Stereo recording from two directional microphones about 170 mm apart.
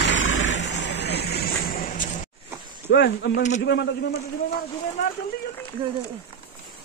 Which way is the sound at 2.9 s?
85° left.